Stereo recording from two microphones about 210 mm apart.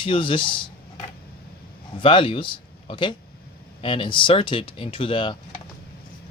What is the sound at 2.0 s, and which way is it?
Speech, 25° left (ahead or behind).